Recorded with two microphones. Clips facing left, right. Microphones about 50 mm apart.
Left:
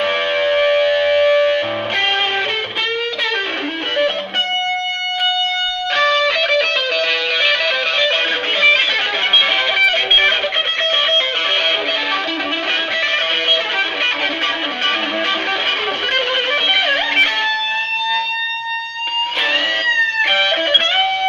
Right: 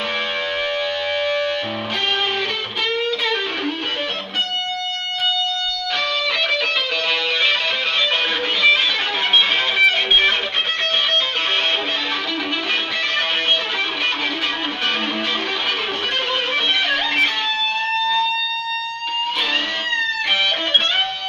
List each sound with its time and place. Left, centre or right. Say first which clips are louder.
0.4 s music: left 8 dB; left
5.9 s music: left 8 dB; left
8.5 s music: left 3 dB; left
16.7 s music: left 5 dB; left